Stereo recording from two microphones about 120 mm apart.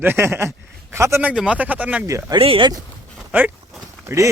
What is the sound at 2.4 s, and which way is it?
Speech, 50° right (ahead or behind).